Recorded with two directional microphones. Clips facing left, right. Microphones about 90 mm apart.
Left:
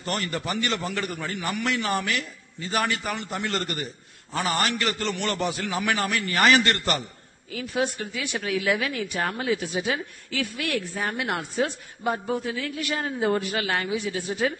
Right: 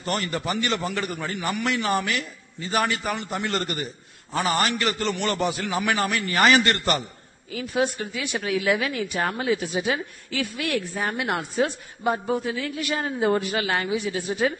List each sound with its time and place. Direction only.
0.0 s speech: 15° right (ahead or behind)